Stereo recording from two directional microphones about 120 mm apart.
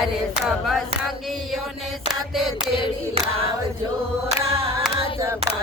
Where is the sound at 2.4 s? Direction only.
Centre (ahead or behind).